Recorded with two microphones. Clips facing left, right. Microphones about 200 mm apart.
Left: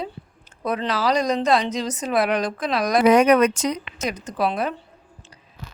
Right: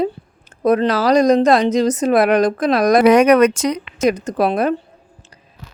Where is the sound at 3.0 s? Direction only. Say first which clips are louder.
Right 3 dB; 75° right (ahead or behind).